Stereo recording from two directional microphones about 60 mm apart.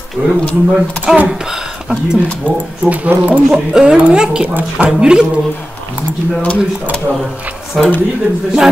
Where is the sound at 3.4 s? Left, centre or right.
Centre.